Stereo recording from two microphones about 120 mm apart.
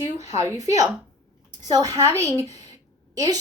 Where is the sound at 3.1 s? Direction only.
30° right (ahead or behind).